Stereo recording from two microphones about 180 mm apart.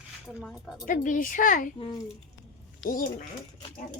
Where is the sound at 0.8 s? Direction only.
50° left (ahead or behind).